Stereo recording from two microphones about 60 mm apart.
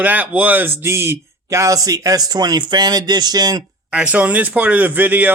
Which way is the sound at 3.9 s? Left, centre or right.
Right.